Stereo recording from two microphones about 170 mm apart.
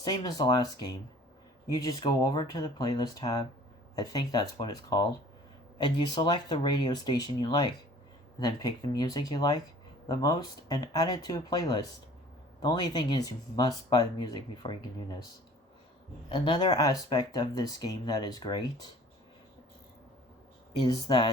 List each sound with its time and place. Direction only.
0.0 s speech: 25° left (ahead or behind)
16.3 s speech: 30° left (ahead or behind)
20.7 s speech: 25° left (ahead or behind)